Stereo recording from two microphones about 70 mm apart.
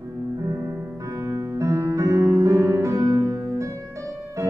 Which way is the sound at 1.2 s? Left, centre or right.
Right.